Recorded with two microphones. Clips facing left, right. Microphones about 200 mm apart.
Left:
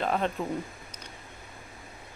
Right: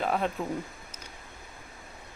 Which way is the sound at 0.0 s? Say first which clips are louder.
Even; 5° right (ahead or behind).